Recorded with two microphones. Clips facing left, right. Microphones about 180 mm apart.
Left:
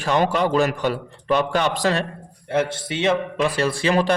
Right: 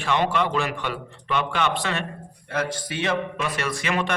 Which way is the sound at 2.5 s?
25° left (ahead or behind).